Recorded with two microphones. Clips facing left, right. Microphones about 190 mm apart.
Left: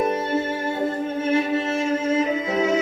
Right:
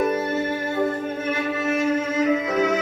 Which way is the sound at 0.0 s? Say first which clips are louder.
Even; 25° left (ahead or behind).